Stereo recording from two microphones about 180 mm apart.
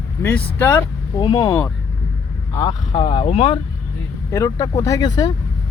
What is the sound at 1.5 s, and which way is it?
Speech, 15° left (ahead or behind).